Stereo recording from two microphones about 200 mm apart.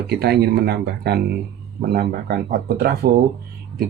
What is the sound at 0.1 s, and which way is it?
Speech, 55° right (ahead or behind).